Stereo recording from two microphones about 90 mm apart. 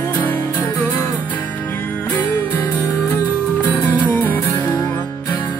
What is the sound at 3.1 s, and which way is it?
Music, 20° left (ahead or behind).